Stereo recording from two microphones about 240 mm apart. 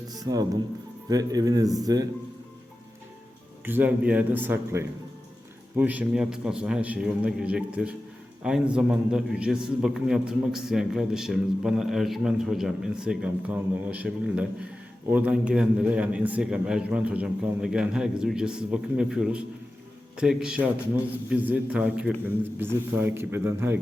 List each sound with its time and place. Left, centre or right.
0.1 s a man's voice: centre
3.7 s a man's voice: centre